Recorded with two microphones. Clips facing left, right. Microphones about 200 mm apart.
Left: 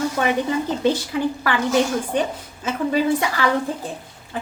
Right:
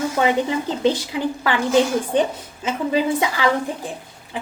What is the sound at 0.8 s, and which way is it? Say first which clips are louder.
Speech: right 1 dB; 20° right (ahead or behind).